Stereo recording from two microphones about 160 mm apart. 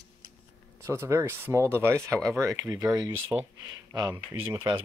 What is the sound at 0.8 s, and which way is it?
Speech, 20° right (ahead or behind).